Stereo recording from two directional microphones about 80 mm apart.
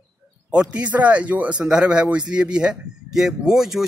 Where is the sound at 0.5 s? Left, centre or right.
Centre.